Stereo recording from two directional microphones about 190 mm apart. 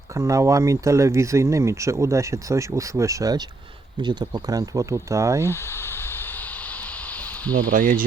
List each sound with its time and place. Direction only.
0.2 s speech: 15° right (ahead or behind)
7.7 s speech: 45° right (ahead or behind)